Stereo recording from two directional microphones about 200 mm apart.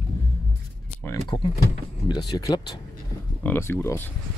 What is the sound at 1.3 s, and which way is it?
Speech, 20° left (ahead or behind).